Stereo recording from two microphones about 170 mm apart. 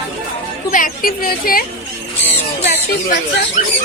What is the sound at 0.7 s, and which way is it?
Speech, 55° left (ahead or behind).